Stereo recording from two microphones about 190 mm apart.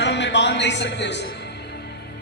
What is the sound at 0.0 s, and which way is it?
Music, 70° left (ahead or behind).